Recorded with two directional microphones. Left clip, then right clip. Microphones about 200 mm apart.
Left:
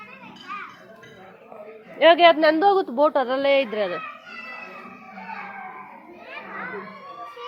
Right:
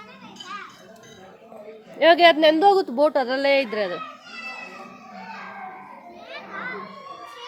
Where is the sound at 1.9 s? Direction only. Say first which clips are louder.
Even; 20° right (ahead or behind).